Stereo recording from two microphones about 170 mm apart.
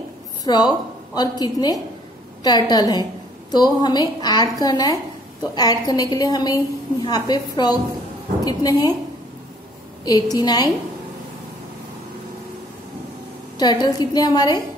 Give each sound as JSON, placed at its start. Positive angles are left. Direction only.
{"t": 0.4, "sound": "a woman's voice", "side_deg": 25}
{"t": 10.3, "sound": "a woman's voice", "side_deg": 25}
{"t": 13.6, "sound": "a woman's voice", "side_deg": 25}